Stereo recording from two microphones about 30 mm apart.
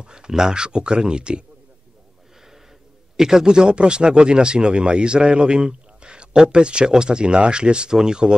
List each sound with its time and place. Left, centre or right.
0.0 s a sound: right
0.3 s speech: right
3.2 s speech: centre